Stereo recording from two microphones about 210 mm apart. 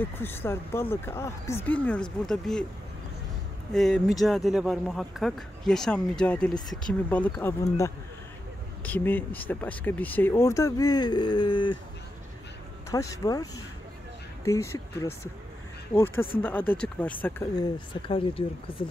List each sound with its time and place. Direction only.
0.0 s speech: 10° left (ahead or behind)
3.7 s speech: centre (ahead or behind); by 11.8 s 20° left (ahead or behind)
12.9 s speech: 15° left (ahead or behind)
17.6 s speech: 25° left (ahead or behind)